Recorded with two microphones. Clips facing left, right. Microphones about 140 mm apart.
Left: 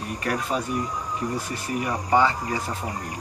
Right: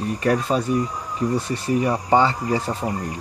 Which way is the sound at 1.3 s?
30° right (ahead or behind).